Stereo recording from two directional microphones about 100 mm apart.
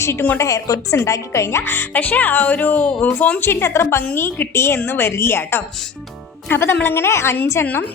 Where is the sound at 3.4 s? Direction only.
25° left (ahead or behind).